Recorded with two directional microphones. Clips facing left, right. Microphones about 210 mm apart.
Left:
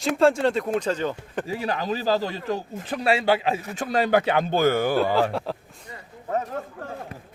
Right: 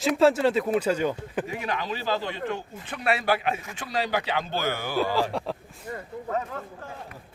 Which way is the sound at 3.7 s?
50° left (ahead or behind).